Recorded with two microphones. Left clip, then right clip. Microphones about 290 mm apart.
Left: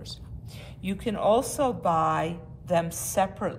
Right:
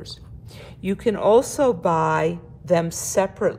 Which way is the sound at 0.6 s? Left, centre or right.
Right.